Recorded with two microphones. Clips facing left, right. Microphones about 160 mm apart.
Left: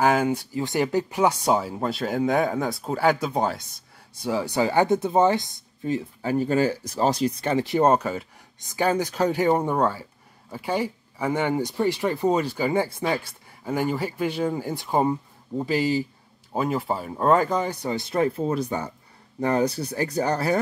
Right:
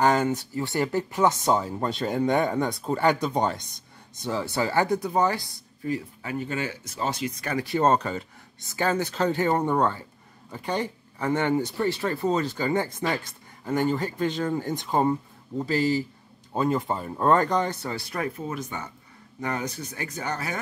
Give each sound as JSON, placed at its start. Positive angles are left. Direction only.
{"t": 0.0, "sound": "speech", "side_deg": 10}
{"t": 6.3, "sound": "speech", "side_deg": 35}